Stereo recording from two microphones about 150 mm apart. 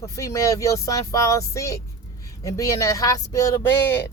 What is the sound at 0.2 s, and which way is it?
Speech, 20° left (ahead or behind).